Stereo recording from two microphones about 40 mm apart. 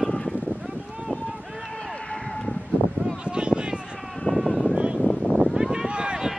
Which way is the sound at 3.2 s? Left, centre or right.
Right.